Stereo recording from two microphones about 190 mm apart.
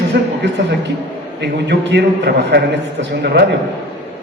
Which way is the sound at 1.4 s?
65° right (ahead or behind).